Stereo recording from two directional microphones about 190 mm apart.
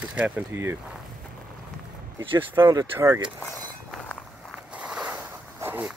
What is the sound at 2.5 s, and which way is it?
Speech, 15° right (ahead or behind).